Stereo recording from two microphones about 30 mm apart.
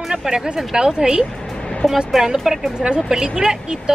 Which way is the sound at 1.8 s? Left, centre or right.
Centre.